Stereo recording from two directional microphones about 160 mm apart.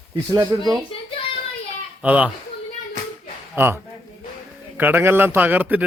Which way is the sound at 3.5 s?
15° right (ahead or behind).